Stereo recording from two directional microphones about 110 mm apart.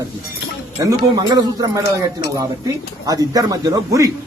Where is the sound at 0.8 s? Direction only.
35° right (ahead or behind).